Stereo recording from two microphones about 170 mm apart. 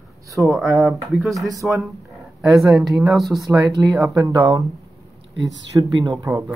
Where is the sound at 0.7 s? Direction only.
Centre (ahead or behind).